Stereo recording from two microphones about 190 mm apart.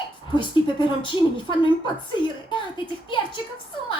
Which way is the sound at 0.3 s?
25° left (ahead or behind).